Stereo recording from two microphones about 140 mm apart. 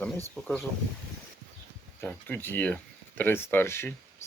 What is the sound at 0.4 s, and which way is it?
Speech, 5° left (ahead or behind).